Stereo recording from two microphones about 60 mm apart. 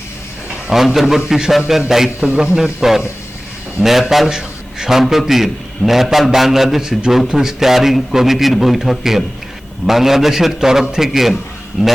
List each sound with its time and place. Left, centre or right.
0.7 s a man's voice: centre